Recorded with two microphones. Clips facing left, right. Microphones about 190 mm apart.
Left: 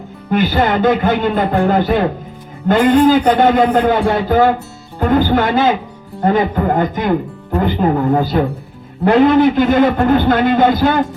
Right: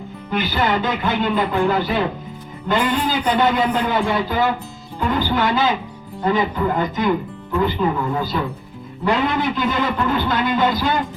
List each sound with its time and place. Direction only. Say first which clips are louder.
0.3 s speech: left 6 dB; 50° left (ahead or behind)